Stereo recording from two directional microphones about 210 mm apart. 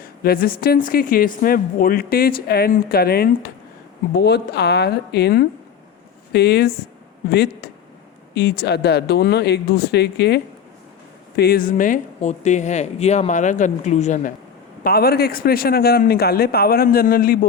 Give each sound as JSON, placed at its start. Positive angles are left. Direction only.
{"t": 0.0, "sound": "a woman's voice", "side_deg": 45}
{"t": 14.8, "sound": "a woman's voice", "side_deg": 45}